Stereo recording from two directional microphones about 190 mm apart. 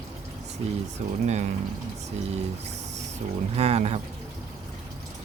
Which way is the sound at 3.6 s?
35° right (ahead or behind).